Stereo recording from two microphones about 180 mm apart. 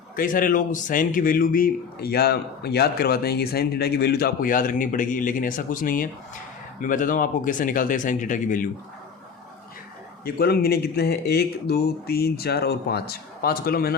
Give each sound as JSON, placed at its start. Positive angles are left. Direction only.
{"t": 0.2, "sound": "a man's voice", "side_deg": 50}
{"t": 10.2, "sound": "speech", "side_deg": 60}